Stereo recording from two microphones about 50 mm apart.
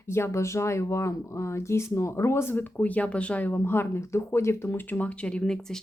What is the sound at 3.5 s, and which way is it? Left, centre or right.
Speech, left.